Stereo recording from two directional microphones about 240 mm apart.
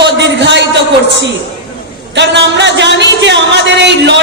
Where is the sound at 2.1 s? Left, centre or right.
Right.